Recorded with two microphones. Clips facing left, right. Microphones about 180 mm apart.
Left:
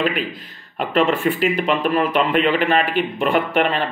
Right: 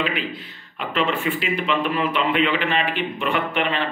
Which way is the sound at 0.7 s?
45° left (ahead or behind).